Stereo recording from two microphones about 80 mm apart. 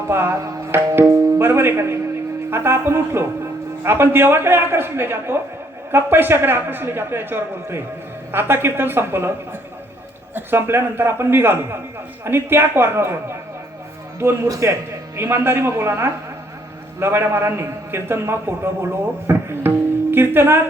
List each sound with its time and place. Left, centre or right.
0.1 s a man's voice: right